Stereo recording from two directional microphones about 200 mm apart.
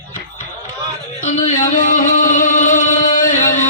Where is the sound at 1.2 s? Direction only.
40° left (ahead or behind).